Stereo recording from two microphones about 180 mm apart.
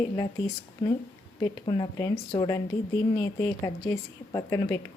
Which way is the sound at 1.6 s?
25° left (ahead or behind).